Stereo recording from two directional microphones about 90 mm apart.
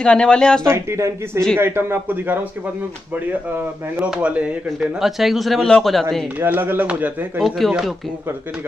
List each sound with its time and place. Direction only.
0.0 s speech: 10° left (ahead or behind)
0.7 s a man's voice: 30° right (ahead or behind)
3.5 s speech: 15° right (ahead or behind)
4.7 s a man's voice: centre (ahead or behind)
6.4 s a man's voice: 25° right (ahead or behind)
7.5 s a man's voice: centre (ahead or behind)